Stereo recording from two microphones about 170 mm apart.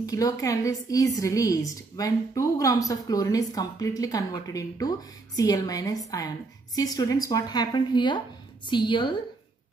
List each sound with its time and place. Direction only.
0.0 s speech: 20° left (ahead or behind)